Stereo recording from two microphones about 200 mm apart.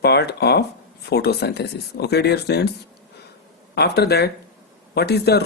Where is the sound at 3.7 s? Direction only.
55° left (ahead or behind).